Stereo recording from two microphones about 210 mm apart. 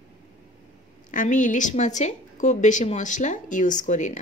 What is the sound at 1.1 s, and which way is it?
A woman's voice, 40° left (ahead or behind).